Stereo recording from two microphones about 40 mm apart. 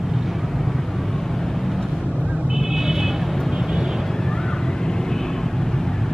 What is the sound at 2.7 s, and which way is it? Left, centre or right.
Vehicle, centre.